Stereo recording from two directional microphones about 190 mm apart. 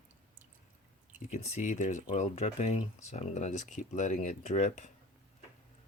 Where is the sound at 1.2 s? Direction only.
40° left (ahead or behind).